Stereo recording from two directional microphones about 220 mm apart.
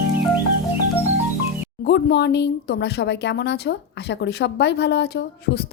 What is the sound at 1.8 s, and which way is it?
Speech, 50° left (ahead or behind).